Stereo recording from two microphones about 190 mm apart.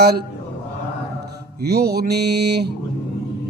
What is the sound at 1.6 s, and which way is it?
Speech, 55° right (ahead or behind).